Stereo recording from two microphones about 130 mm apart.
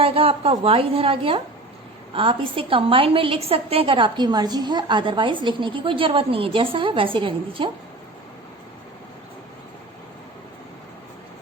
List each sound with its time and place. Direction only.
0.0 s a woman's voice: 50° right (ahead or behind)